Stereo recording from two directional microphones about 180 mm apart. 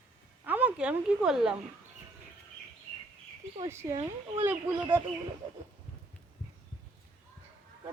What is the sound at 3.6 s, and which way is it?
Speech, 15° right (ahead or behind).